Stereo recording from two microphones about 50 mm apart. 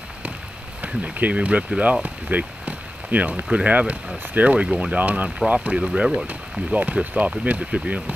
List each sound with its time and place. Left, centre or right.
0.8 s speech: right
2.0 s a sound: right
3.5 s speech: right
5.9 s speech: centre
6.7 s speech: right